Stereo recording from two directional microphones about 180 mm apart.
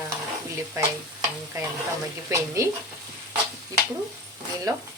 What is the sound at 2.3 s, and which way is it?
Speech, 15° right (ahead or behind).